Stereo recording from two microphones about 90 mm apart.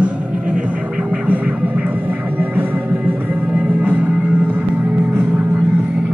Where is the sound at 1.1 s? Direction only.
15° right (ahead or behind).